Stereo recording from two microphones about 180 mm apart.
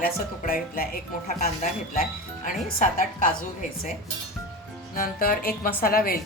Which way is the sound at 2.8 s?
45° left (ahead or behind).